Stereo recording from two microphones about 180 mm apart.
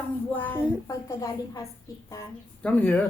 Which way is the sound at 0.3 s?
10° left (ahead or behind).